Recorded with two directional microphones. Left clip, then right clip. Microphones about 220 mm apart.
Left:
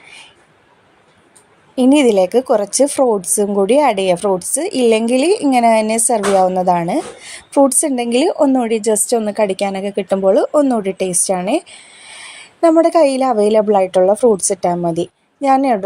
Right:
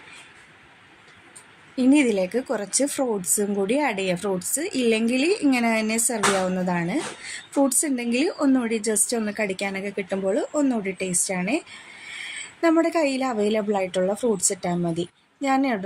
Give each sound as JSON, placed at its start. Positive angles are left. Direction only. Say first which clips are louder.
{"t": 1.7, "sound": "a woman's voice", "louder": "left 9 dB", "side_deg": 30}